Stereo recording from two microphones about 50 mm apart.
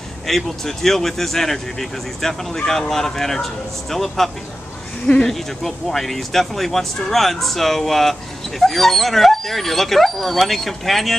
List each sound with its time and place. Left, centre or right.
0.3 s speech: centre
5.0 s speech: centre
5.6 s speech: centre